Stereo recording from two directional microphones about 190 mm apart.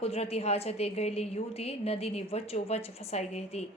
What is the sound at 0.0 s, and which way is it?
A woman's voice, 30° left (ahead or behind).